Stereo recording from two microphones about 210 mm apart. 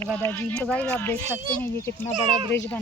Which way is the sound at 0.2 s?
10° left (ahead or behind).